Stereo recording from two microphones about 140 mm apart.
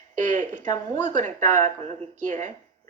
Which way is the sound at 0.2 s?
60° right (ahead or behind).